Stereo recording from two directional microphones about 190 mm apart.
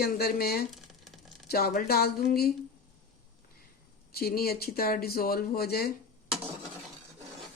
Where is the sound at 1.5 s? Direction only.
55° left (ahead or behind).